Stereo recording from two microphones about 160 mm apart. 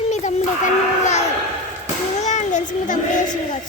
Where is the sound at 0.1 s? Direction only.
45° left (ahead or behind).